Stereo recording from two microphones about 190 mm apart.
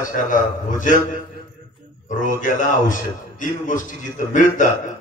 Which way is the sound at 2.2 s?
45° left (ahead or behind).